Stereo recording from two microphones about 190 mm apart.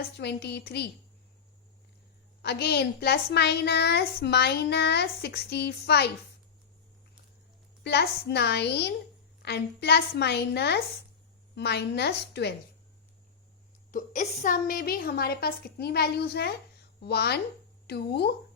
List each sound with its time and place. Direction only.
0.0 s a woman's voice: 60° left (ahead or behind)
2.4 s a woman's voice: 60° left (ahead or behind)
7.9 s a woman's voice: 60° left (ahead or behind)
13.9 s a woman's voice: 40° left (ahead or behind); by 18.3 s 60° left (ahead or behind)